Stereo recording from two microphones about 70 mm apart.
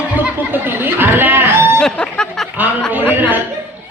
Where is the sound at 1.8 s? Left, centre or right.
Centre.